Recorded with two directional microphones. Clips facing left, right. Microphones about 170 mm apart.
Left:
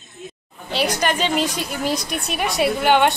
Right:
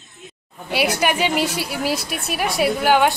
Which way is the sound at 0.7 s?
10° right (ahead or behind).